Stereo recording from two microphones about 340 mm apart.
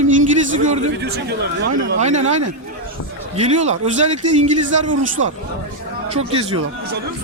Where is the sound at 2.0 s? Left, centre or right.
Centre.